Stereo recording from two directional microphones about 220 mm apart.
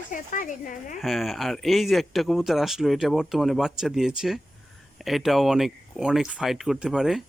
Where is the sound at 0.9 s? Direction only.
Centre (ahead or behind).